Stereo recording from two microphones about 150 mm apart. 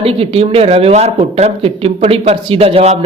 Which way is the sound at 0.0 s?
40° right (ahead or behind).